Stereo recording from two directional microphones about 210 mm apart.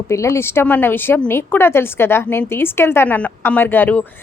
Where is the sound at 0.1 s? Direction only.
15° left (ahead or behind).